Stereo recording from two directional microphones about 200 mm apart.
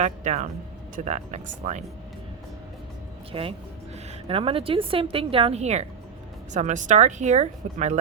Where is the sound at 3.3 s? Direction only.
25° right (ahead or behind).